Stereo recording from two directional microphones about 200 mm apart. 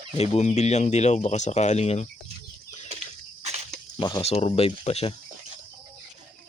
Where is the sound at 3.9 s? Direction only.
25° left (ahead or behind).